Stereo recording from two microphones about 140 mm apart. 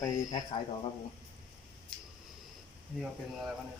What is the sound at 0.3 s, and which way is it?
Speech, 25° left (ahead or behind).